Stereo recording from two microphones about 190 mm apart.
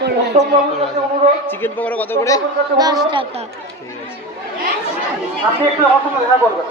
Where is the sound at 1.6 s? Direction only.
10° left (ahead or behind).